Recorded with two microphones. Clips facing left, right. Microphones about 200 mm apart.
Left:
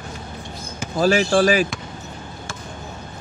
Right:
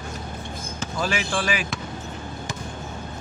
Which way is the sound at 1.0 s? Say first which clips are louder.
Left 10 dB; 40° left (ahead or behind).